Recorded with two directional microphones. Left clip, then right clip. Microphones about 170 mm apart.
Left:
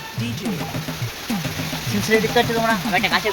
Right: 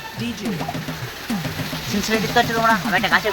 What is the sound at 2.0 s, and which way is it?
Speech, 5° left (ahead or behind).